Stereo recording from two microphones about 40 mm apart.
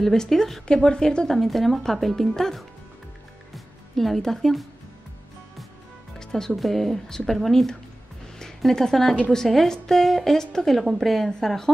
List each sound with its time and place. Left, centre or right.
0.0 s a woman's voice: centre
0.8 s a woman's voice: centre
1.3 s a woman's voice: centre
6.1 s music: centre
6.5 s a woman's voice: centre